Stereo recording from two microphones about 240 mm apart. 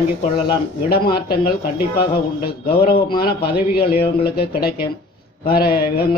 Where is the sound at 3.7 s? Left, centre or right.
Left.